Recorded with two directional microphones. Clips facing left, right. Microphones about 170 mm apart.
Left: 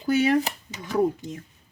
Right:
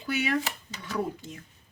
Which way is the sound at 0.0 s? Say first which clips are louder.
Left 8 dB; 40° left (ahead or behind).